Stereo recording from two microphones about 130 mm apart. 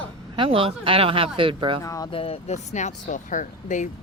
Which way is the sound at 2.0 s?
45° left (ahead or behind).